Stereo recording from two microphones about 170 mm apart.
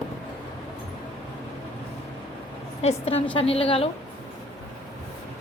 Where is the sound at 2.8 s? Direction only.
35° left (ahead or behind).